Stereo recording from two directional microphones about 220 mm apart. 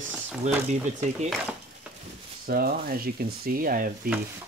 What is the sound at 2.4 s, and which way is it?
Speech, 40° right (ahead or behind).